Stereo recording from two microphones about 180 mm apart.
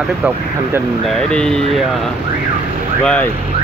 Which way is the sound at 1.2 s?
5° left (ahead or behind).